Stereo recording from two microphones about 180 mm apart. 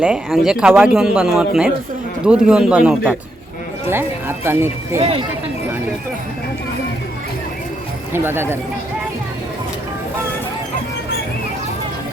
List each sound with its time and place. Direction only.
0.0 s speech: 5° right (ahead or behind)
4.9 s speech: 35° right (ahead or behind)
8.1 s speech: 15° right (ahead or behind)